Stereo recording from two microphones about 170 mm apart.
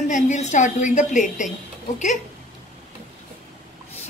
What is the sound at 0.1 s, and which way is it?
A woman's voice, 45° left (ahead or behind).